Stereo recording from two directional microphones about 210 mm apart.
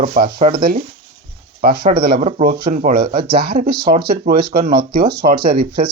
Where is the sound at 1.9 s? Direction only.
45° right (ahead or behind).